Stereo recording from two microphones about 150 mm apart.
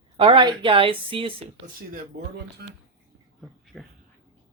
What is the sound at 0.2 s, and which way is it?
Speech, 35° right (ahead or behind).